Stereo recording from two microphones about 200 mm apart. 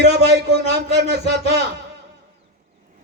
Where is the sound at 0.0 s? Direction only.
55° right (ahead or behind).